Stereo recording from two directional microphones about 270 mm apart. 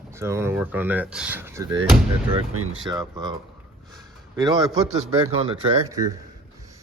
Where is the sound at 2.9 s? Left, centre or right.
Centre.